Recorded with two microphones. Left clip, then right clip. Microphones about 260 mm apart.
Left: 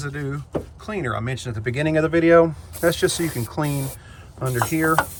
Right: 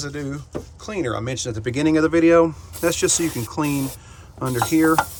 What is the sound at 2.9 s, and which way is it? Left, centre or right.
Speech, right.